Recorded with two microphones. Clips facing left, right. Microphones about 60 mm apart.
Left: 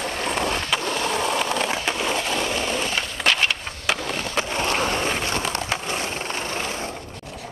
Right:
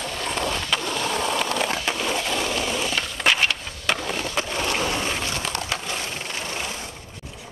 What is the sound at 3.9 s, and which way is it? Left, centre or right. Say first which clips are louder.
Skateboard: even; centre.